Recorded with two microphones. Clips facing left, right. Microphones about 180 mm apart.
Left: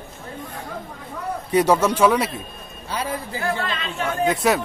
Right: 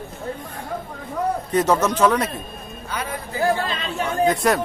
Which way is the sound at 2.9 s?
30° left (ahead or behind).